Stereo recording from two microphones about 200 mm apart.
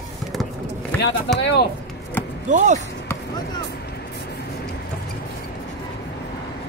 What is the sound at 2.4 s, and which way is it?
Speech, 35° right (ahead or behind).